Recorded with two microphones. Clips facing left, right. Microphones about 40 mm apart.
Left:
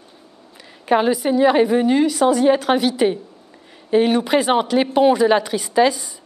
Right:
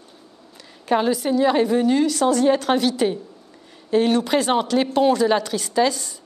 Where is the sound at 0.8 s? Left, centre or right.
Centre.